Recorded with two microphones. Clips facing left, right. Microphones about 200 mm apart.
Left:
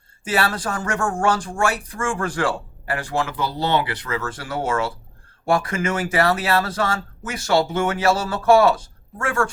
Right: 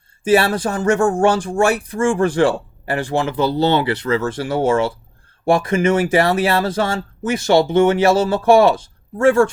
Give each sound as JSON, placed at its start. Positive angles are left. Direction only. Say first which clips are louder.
{"t": 0.3, "sound": "speech", "louder": "right 5 dB", "side_deg": -25}